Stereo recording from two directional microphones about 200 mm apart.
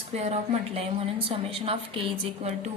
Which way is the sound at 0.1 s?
35° right (ahead or behind).